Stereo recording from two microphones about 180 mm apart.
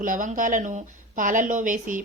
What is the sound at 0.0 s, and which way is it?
A woman's voice, 45° right (ahead or behind).